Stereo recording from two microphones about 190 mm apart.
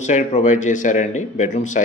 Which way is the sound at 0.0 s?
40° left (ahead or behind).